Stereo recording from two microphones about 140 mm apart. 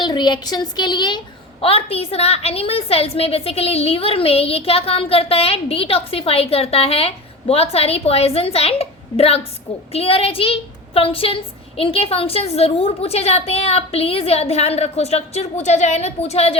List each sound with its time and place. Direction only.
0.0 s a woman's voice: 35° left (ahead or behind)
1.6 s a woman's voice: 45° left (ahead or behind)